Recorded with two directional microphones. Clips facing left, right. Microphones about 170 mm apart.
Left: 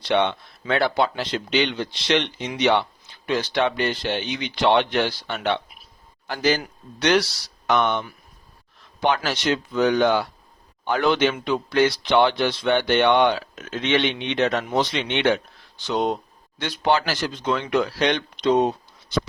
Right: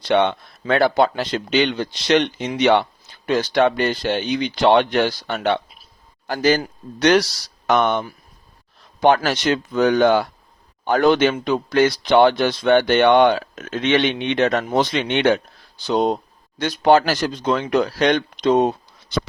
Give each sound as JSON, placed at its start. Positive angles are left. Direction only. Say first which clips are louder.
{"t": 0.0, "sound": "a man's voice", "louder": "right 4 dB", "side_deg": -50}
{"t": 15.8, "sound": "speech", "louder": "right 4 dB", "side_deg": -35}